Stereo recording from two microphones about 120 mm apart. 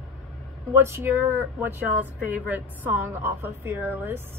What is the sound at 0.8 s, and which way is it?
Speech, 20° right (ahead or behind).